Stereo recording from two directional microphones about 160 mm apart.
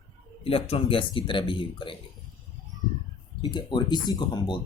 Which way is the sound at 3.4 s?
25° left (ahead or behind).